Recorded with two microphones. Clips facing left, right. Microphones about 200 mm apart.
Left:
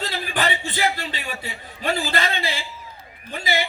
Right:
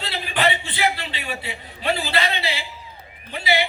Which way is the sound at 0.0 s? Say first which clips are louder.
Right 2 dB; 45° left (ahead or behind).